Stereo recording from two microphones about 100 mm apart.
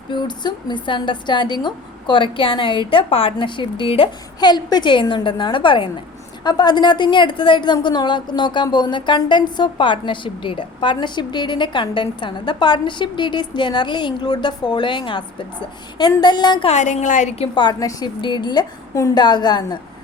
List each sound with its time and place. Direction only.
0.1 s a woman's voice: 50° left (ahead or behind); by 3.3 s 65° left (ahead or behind)
3.3 s a woman's voice: 55° left (ahead or behind)
4.4 s a woman's voice: 45° left (ahead or behind)
16.2 s a woman's voice: 45° left (ahead or behind)
18.2 s a woman's voice: 50° left (ahead or behind)
18.9 s a woman's voice: 35° left (ahead or behind)
19.2 s a woman's voice: 45° left (ahead or behind)